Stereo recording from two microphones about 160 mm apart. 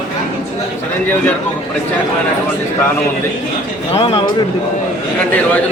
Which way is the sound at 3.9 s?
35° left (ahead or behind).